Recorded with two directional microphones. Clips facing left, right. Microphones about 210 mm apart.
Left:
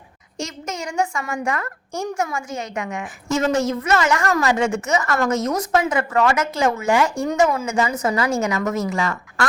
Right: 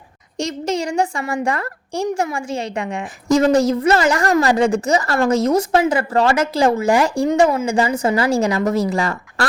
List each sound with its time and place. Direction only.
0.3 s a woman's voice: 35° right (ahead or behind)